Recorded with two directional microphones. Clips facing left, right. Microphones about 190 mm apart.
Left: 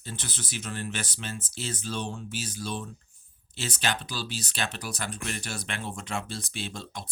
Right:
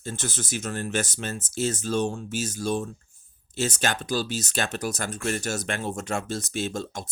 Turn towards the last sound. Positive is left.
turn(degrees=-45)  # may be behind; listen again after turning